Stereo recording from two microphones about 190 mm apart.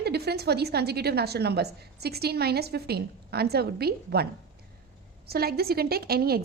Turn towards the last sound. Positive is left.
turn(degrees=-55)  # may be behind; listen again after turning